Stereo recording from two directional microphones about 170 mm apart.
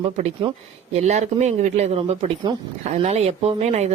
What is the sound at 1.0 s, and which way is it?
Speech, 40° right (ahead or behind).